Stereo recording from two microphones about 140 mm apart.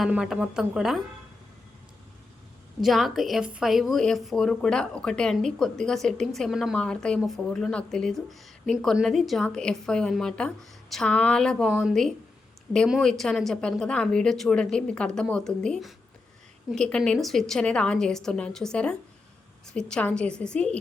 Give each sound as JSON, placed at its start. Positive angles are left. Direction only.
{"t": 0.1, "sound": "speech", "side_deg": -5}
{"t": 2.8, "sound": "a woman's voice", "side_deg": 0}